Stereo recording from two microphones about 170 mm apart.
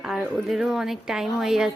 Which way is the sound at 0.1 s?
Centre (ahead or behind).